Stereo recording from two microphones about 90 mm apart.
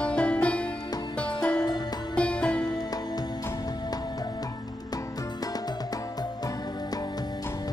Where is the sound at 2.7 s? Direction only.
50° left (ahead or behind).